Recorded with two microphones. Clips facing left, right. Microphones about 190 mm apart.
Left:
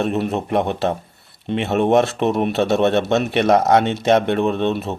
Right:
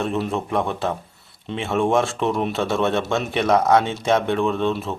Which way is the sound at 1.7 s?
20° left (ahead or behind).